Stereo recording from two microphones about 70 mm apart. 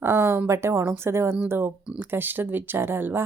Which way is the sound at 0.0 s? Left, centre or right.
Right.